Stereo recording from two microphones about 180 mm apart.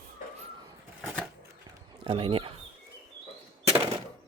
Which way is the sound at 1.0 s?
5° right (ahead or behind).